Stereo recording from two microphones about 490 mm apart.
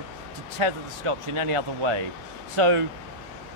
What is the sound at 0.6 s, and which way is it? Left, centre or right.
Speech, right.